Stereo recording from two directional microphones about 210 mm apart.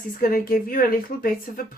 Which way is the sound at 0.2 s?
45° left (ahead or behind).